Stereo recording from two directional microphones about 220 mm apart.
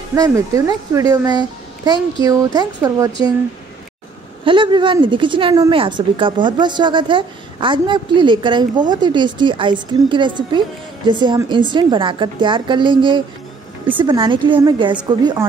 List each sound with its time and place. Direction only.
0.1 s speech: 15° right (ahead or behind)
4.5 s speech: 20° right (ahead or behind)